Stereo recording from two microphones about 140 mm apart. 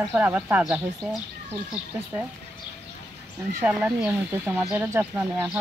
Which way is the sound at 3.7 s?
5° right (ahead or behind).